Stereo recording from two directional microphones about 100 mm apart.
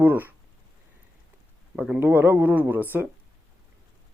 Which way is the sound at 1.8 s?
10° right (ahead or behind).